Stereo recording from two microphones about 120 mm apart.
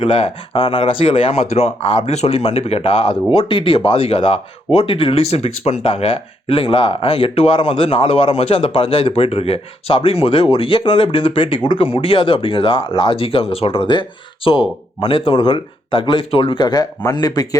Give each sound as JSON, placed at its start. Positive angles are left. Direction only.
{"t": 0.0, "sound": "speech", "side_deg": 50}